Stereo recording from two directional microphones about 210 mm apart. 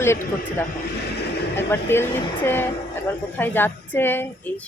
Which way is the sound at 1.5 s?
10° left (ahead or behind).